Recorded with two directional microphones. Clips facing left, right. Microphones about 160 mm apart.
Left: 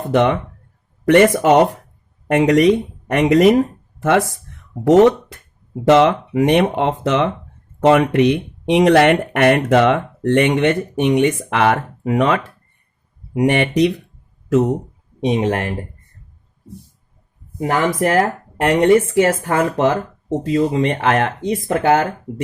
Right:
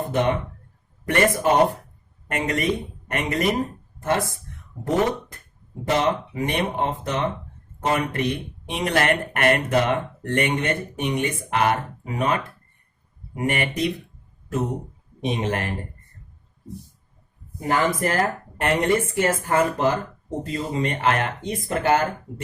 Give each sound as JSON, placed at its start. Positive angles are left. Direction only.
{"t": 0.1, "sound": "speech", "side_deg": 90}
{"t": 17.6, "sound": "speech", "side_deg": 75}
{"t": 20.5, "sound": "speech", "side_deg": 90}